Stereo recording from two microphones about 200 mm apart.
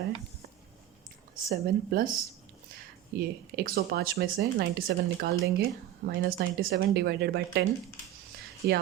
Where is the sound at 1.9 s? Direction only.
45° right (ahead or behind).